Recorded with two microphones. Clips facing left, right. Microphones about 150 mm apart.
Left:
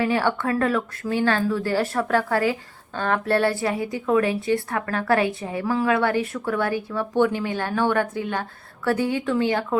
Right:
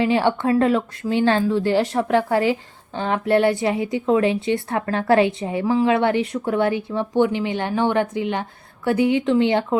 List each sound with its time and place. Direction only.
0.0 s speech: 20° right (ahead or behind)